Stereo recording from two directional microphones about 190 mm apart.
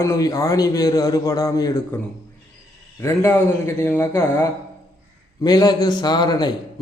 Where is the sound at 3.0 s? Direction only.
15° left (ahead or behind).